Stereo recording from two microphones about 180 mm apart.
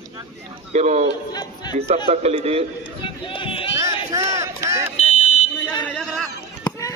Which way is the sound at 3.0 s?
30° left (ahead or behind).